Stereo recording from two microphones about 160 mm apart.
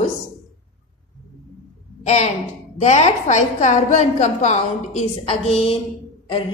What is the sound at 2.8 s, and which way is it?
A woman's voice, 45° left (ahead or behind).